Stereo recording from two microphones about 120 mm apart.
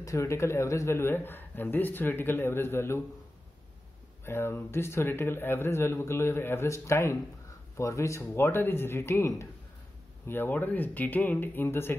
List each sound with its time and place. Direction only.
0.0 s a man's voice: 25° left (ahead or behind)
4.2 s a man's voice: 20° left (ahead or behind)